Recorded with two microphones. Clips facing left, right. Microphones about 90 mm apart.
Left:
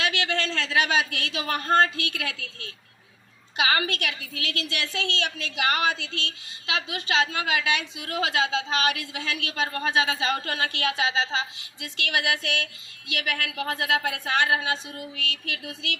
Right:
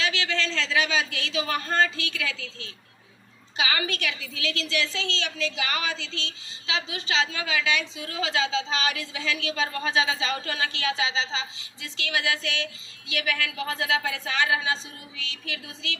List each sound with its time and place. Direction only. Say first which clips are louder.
0.0 s a woman's voice: left 1 dB; 55° left (ahead or behind)